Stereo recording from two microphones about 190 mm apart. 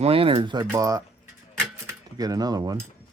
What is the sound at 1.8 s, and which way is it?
Cutlery, 20° right (ahead or behind).